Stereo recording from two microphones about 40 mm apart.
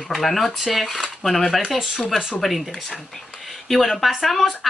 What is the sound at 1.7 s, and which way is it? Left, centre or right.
Speech, centre.